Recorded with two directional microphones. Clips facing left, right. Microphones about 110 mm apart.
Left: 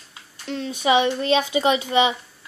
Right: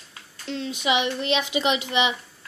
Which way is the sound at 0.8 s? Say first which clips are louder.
Left 6 dB; 40° left (ahead or behind).